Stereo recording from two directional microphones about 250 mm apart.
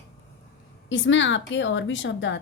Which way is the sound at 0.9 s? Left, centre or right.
Left.